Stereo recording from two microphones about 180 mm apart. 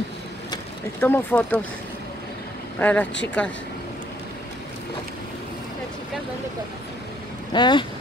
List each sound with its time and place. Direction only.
1.0 s speech: 10° left (ahead or behind)
2.8 s speech: 10° left (ahead or behind)
7.5 s speech: 25° left (ahead or behind)